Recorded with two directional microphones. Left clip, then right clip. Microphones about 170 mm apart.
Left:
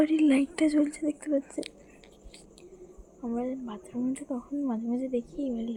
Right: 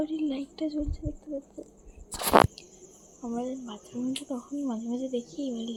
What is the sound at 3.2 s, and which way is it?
Speech, 5° left (ahead or behind).